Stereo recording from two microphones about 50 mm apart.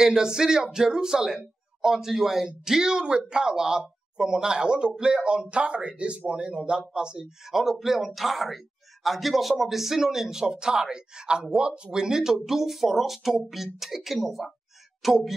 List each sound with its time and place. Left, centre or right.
0.0 s speech: centre